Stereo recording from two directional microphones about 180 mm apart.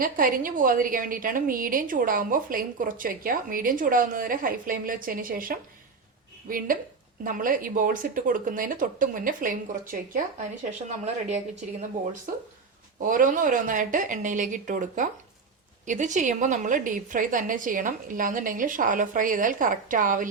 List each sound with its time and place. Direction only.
0.0 s a woman's voice: 50° right (ahead or behind)
7.3 s a woman's voice: 50° right (ahead or behind)
12.3 s a woman's voice: 50° right (ahead or behind)